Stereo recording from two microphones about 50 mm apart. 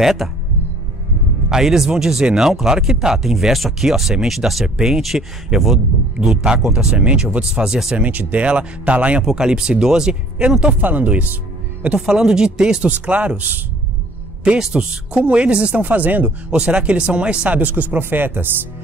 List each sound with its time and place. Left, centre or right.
0.0 s speech: centre
1.5 s speech: centre
7.0 s speech: right
7.4 s speech: centre
8.0 s speech: right
9.2 s speech: centre
10.7 s speech: right
12.1 s speech: centre
12.8 s speech: right
14.7 s speech: right
16.5 s speech: centre; by 18.5 s right